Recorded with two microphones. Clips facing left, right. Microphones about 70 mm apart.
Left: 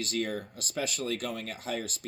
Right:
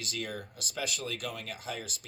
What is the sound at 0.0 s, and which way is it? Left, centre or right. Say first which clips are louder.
Speech: left 6 dB; left.